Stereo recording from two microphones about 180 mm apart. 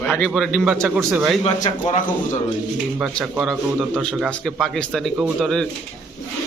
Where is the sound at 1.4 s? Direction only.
35° left (ahead or behind).